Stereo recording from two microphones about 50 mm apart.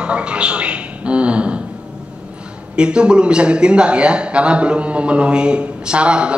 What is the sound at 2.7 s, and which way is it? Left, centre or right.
A man's voice, centre.